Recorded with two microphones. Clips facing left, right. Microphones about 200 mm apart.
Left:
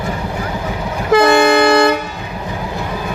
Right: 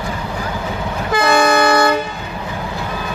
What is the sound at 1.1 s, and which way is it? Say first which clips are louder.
Train: left 4 dB; 25° left (ahead or behind).